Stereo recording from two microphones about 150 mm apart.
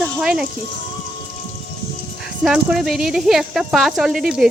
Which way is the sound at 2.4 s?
5° right (ahead or behind).